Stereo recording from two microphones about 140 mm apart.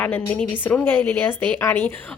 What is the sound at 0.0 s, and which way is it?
Speech, 10° left (ahead or behind).